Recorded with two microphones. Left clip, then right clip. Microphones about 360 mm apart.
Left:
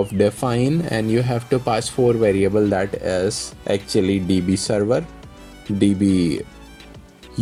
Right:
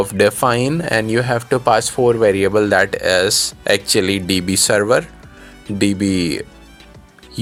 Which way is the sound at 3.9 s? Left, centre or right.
Right.